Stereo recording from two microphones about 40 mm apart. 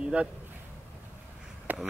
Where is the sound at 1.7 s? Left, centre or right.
Right.